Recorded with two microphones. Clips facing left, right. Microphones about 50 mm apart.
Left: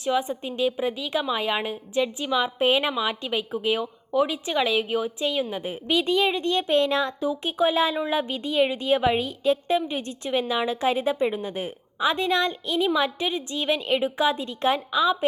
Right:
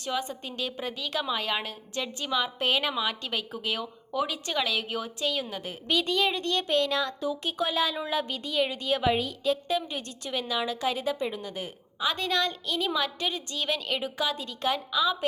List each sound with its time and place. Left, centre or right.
0.0 s a woman's voice: centre